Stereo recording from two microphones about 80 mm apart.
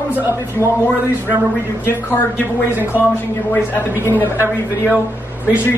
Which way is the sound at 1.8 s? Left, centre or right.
Left.